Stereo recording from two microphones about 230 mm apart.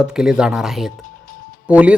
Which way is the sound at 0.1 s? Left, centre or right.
Centre.